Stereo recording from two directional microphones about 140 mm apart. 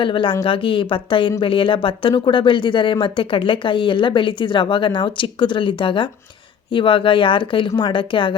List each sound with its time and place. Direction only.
0.0 s speech: 35° left (ahead or behind)